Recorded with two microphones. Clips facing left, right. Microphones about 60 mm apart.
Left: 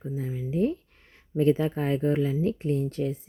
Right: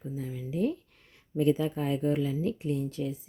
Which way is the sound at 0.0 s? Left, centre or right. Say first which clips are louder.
Left 4 dB; left.